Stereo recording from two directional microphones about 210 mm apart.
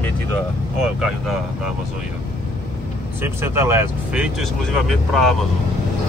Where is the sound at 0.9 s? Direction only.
Centre (ahead or behind).